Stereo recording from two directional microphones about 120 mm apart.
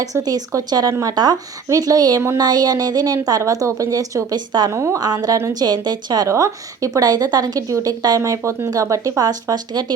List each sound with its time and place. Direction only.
0.0 s a woman's voice: 30° right (ahead or behind)
4.7 s a woman's voice: 25° right (ahead or behind)
4.9 s a woman's voice: 35° right (ahead or behind)